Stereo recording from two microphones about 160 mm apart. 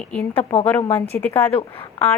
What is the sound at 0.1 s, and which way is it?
A woman's voice, 5° left (ahead or behind).